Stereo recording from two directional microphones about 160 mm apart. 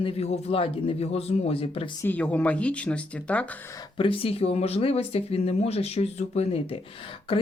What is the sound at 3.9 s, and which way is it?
Speech, 35° left (ahead or behind).